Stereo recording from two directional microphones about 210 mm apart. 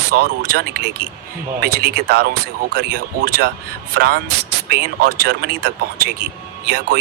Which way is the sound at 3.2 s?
50° right (ahead or behind).